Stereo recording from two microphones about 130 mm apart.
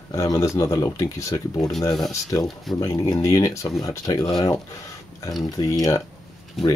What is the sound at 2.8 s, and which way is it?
Speech, 30° left (ahead or behind).